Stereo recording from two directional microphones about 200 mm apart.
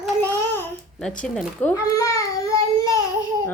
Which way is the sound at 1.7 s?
15° left (ahead or behind).